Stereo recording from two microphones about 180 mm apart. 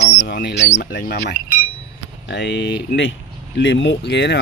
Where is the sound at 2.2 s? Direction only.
75° left (ahead or behind).